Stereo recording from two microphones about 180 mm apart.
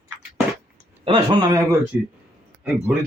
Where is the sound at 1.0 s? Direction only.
30° right (ahead or behind).